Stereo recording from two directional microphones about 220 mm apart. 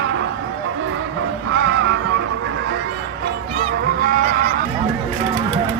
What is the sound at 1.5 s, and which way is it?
Music, 55° right (ahead or behind).